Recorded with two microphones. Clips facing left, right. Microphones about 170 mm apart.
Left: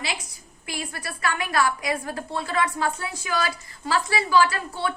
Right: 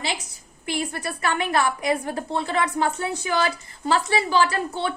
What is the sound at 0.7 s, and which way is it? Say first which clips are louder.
A woman's voice: right 6 dB; 25° right (ahead or behind).